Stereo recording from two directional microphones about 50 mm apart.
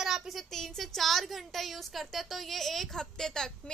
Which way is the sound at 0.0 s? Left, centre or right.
Centre.